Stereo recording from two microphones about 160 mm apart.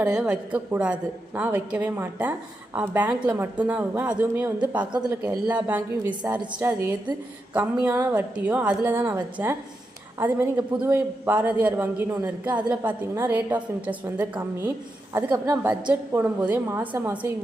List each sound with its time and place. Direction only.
0.0 s a man's voice: 5° right (ahead or behind)